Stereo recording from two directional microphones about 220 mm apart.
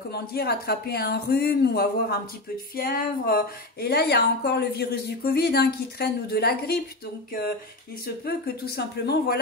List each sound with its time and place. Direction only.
0.1 s speech: 45° left (ahead or behind)
8.3 s speech: 45° left (ahead or behind)